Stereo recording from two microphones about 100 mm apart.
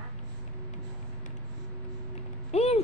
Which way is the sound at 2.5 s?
90° left.